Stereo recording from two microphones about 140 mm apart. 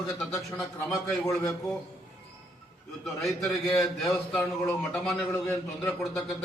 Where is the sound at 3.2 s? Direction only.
Centre (ahead or behind).